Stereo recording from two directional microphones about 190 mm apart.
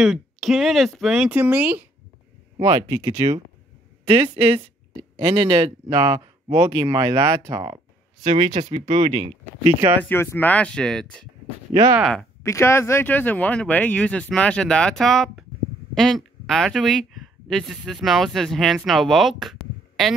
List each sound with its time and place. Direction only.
0.0 s speech: centre (ahead or behind)
4.0 s a sound: 25° right (ahead or behind)
5.2 s speech: 25° right (ahead or behind)
10.0 s speech: 10° left (ahead or behind)
11.7 s speech: 15° right (ahead or behind)
12.0 s speech: centre (ahead or behind)
12.4 s speech: 15° left (ahead or behind)